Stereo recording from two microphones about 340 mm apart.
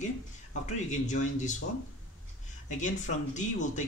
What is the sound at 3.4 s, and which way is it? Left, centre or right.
Speech, left.